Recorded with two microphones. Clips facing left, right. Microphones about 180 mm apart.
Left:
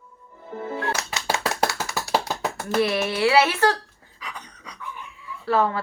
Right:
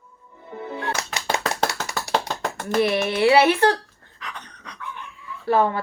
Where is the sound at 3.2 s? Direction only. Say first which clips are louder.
Right 3 dB; 20° right (ahead or behind).